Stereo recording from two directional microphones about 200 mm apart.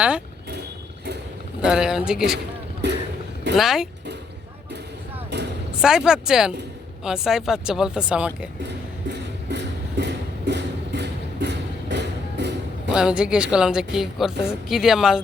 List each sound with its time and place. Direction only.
1.6 s a woman's voice: 5° right (ahead or behind)
3.5 s a woman's voice: centre (ahead or behind)
5.3 s a sound: 60° right (ahead or behind)
5.7 s a woman's voice: 5° right (ahead or behind)
9.0 s a sound: 60° right (ahead or behind)
12.9 s a woman's voice: 5° right (ahead or behind)